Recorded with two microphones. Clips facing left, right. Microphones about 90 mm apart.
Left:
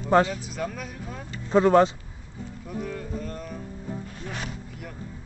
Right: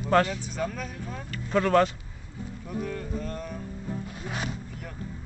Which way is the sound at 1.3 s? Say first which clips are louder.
Left 4 dB; 20° left (ahead or behind).